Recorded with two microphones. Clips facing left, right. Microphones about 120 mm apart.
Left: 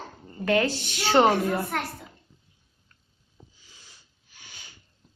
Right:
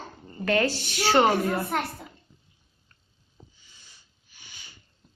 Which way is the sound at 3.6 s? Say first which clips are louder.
Left 3 dB; 90° left.